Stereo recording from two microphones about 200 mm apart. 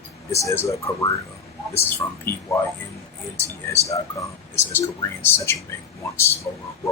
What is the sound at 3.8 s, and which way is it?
Speech, 15° left (ahead or behind).